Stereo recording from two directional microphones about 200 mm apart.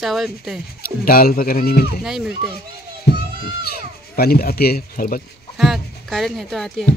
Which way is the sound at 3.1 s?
55° left (ahead or behind).